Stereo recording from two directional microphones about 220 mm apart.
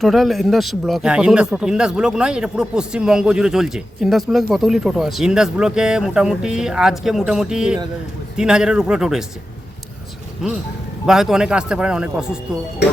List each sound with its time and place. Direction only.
0.0 s speech: centre (ahead or behind)
11.0 s speech: centre (ahead or behind)